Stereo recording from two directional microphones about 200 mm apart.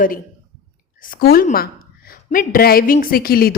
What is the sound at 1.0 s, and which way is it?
A woman's voice, 45° left (ahead or behind).